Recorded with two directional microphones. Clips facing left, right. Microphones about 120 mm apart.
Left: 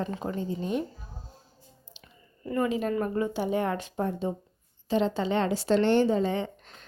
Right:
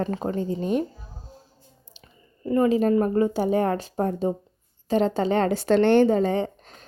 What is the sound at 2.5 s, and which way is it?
A woman's voice, 30° right (ahead or behind).